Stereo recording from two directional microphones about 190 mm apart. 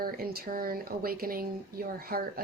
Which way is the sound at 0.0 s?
50° right (ahead or behind).